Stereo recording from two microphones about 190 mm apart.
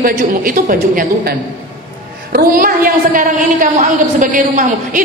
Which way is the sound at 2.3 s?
50° right (ahead or behind).